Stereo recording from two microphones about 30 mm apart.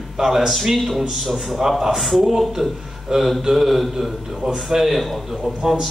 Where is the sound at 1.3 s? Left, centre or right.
Centre.